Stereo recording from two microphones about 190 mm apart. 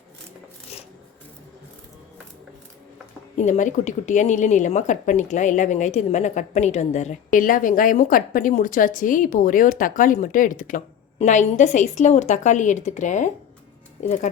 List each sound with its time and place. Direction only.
3.3 s a woman's voice: 40° left (ahead or behind)